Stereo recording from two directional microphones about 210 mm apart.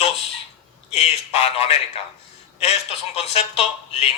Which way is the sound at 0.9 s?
30° left (ahead or behind).